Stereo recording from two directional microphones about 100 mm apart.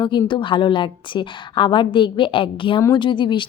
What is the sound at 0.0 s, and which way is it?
Speech, 50° left (ahead or behind).